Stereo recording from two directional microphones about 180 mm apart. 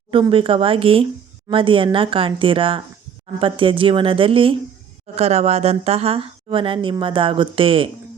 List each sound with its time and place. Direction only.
0.1 s speech: 30° right (ahead or behind)